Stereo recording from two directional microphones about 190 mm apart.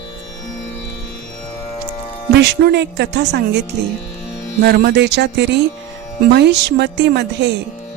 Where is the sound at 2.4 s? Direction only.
60° right (ahead or behind).